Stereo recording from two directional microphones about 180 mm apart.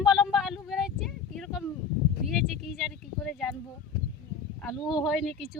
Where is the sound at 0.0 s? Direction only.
Centre (ahead or behind).